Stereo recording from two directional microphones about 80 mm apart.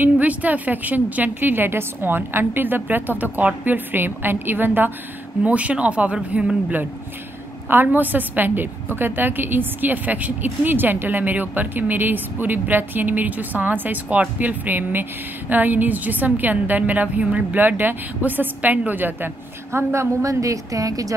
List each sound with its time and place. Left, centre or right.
0.0 s a woman's voice: centre
7.7 s a woman's voice: right